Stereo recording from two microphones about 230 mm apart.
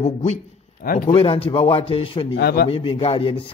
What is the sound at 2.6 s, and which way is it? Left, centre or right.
Speech, left.